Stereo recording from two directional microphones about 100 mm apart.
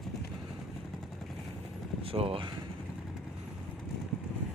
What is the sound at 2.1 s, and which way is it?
Speech, 65° right (ahead or behind).